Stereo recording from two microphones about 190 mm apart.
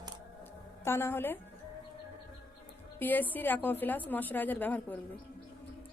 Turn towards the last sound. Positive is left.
turn(degrees=10)  # may be behind; listen again after turning